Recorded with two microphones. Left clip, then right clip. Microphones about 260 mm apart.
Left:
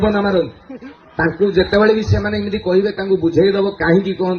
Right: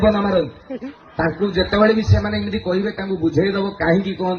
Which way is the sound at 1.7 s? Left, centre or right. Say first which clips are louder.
Left 3 dB; left.